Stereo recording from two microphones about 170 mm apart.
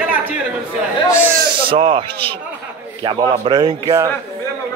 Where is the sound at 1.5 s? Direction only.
30° right (ahead or behind).